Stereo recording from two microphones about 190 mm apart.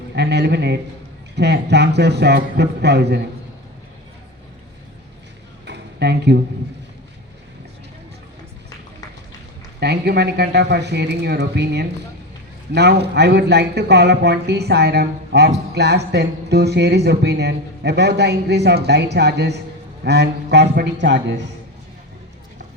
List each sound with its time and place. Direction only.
0.2 s speech: 60° right (ahead or behind)
5.6 s a sound: 60° right (ahead or behind)
9.8 s speech: 60° right (ahead or behind)